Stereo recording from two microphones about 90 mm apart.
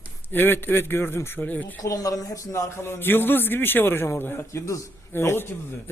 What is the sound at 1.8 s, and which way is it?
Speech, 40° left (ahead or behind).